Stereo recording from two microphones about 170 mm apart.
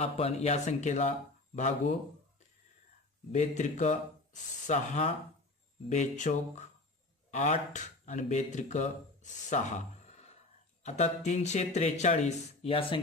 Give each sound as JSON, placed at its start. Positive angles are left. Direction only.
{"t": 0.0, "sound": "speech", "side_deg": 35}
{"t": 3.3, "sound": "speech", "side_deg": 45}
{"t": 10.8, "sound": "speech", "side_deg": 40}